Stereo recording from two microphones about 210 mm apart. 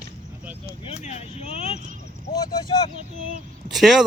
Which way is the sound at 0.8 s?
30° left (ahead or behind).